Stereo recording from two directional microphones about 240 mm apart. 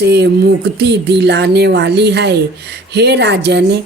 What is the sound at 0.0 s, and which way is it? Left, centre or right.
Speech, right.